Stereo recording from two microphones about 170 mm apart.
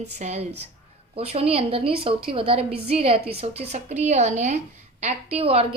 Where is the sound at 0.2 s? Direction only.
40° right (ahead or behind).